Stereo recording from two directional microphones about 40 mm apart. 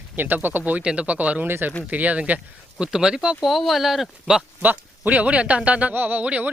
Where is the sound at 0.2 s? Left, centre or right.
Right.